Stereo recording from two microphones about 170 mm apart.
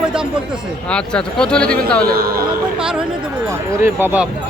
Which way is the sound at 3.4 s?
15° right (ahead or behind).